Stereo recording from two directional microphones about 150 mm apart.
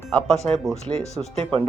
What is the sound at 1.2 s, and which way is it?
Speech, 25° right (ahead or behind).